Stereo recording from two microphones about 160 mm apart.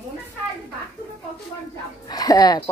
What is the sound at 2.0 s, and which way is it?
Speech, 25° left (ahead or behind).